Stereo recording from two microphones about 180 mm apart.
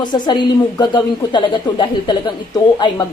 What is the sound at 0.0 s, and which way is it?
A woman's voice, 25° left (ahead or behind).